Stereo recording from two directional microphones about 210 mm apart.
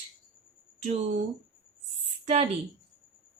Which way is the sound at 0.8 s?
30° right (ahead or behind).